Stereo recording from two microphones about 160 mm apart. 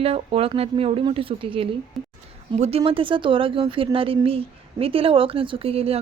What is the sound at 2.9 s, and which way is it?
Speech, 35° right (ahead or behind).